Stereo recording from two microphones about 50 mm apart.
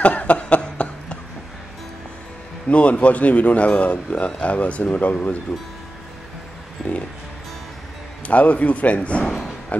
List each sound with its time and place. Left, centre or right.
0.0 s cough: left
2.7 s speech: left
8.3 s speech: left